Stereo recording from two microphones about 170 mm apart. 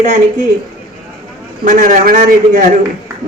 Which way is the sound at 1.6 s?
55° right (ahead or behind).